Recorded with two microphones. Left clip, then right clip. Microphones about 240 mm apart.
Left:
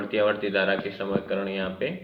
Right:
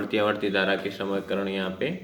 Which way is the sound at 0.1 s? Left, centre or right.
Right.